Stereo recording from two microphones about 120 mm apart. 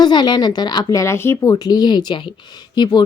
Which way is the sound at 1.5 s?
35° left (ahead or behind).